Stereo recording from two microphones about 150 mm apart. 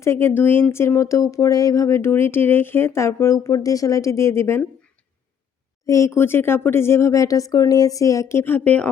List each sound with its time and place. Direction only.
0.0 s speech: 15° left (ahead or behind)
5.8 s speech: 20° left (ahead or behind)